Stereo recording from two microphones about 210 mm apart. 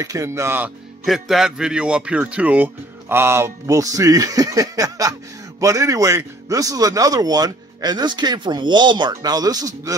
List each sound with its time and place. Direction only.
0.0 s a man's voice: 15° right (ahead or behind)
1.0 s a man's voice: centre (ahead or behind); by 9.9 s 15° right (ahead or behind)